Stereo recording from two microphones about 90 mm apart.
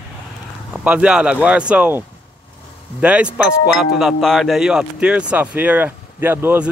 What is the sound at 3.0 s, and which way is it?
Speech, 15° right (ahead or behind).